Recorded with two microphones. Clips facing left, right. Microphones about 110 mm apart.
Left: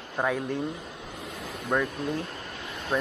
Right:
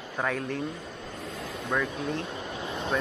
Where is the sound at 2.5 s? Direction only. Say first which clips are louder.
Right 5 dB; 25° right (ahead or behind).